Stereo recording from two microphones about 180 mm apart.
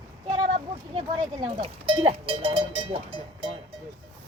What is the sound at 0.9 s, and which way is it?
Speech, 30° right (ahead or behind).